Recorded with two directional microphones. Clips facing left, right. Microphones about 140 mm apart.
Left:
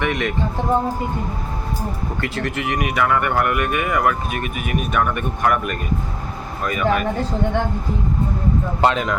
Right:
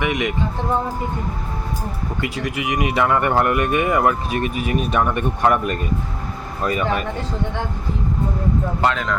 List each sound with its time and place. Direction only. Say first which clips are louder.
0.0 s speech: even; 15° right (ahead or behind)
2.2 s speech: even; 10° right (ahead or behind); by 6.8 s 30° right (ahead or behind)
8.8 s speech: left 4 dB; 20° left (ahead or behind)